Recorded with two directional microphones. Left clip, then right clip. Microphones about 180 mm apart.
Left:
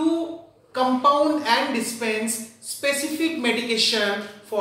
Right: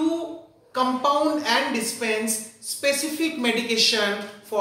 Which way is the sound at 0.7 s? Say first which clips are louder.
Left 3 dB; 20° right (ahead or behind).